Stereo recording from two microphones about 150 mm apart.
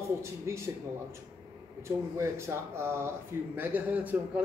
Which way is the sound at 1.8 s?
15° right (ahead or behind).